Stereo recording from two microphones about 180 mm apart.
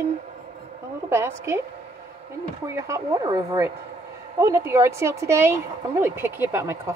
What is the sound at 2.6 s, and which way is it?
Speech, 15° right (ahead or behind).